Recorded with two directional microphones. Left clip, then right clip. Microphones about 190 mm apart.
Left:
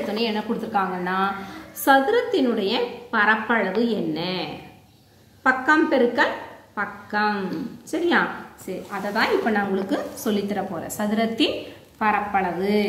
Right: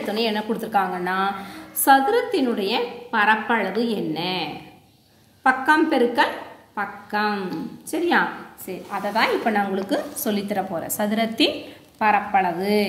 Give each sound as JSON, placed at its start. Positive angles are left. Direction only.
{"t": 0.1, "sound": "a woman's voice", "side_deg": -30}
{"t": 1.0, "sound": "a woman's voice", "side_deg": -20}